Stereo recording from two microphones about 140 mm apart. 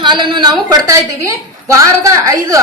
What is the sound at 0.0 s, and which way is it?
A woman's voice, 35° right (ahead or behind).